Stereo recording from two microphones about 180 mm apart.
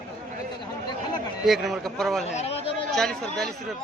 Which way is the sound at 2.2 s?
35° left (ahead or behind).